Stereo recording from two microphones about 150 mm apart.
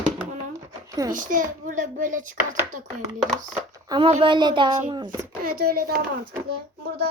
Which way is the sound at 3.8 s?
30° right (ahead or behind).